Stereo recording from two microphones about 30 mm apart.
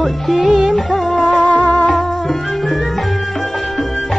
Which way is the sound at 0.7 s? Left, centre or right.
Centre.